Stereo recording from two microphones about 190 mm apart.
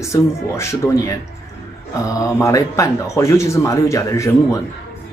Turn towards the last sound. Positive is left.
turn(degrees=15)  # may be behind; listen again after turning